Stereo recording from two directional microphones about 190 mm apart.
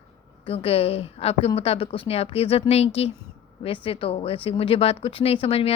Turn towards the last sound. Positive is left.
turn(degrees=30)  # may be behind; listen again after turning